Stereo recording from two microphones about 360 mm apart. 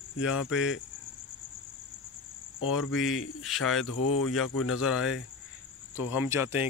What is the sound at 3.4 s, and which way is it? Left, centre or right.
Speech, centre.